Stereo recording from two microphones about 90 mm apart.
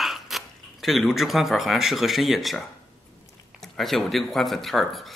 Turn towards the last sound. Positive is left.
turn(degrees=0)  # may be behind; listen again after turning